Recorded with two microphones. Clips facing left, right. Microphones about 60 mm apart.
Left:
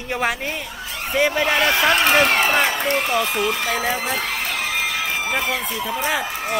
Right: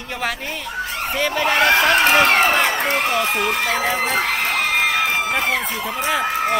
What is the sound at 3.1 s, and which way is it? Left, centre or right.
Speech, right.